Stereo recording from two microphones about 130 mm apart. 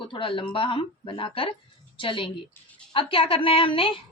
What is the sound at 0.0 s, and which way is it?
A woman's voice, 45° left (ahead or behind).